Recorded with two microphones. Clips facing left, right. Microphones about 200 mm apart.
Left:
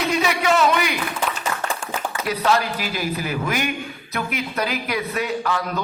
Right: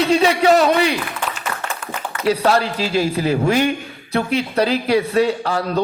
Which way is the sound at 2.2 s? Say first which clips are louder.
Right 5 dB; 30° right (ahead or behind).